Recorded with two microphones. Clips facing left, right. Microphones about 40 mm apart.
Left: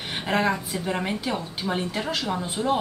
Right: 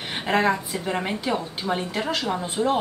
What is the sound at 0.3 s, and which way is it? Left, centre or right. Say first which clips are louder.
A woman's voice: right 2 dB; centre.